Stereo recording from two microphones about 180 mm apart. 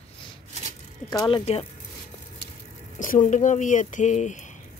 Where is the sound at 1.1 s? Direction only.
20° left (ahead or behind).